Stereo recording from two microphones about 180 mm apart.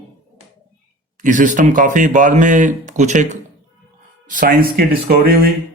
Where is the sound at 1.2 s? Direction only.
45° right (ahead or behind).